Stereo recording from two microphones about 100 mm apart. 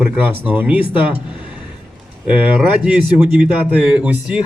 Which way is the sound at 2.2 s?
15° right (ahead or behind).